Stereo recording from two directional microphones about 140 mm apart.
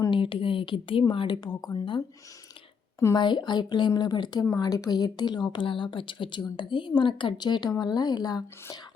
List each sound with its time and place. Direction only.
0.0 s speech: 35° left (ahead or behind)
3.2 s speech: 30° left (ahead or behind)